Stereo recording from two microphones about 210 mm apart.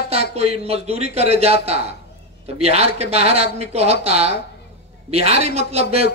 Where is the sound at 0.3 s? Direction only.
30° right (ahead or behind).